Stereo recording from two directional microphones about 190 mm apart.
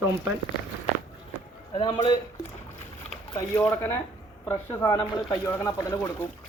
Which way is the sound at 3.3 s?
10° left (ahead or behind).